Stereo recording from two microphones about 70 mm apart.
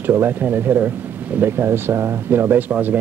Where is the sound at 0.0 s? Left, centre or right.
Right.